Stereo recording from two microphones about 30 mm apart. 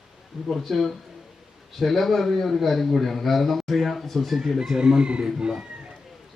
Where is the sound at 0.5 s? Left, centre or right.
Centre.